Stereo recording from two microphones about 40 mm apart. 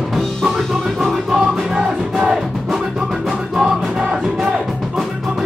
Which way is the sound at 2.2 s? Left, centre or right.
Centre.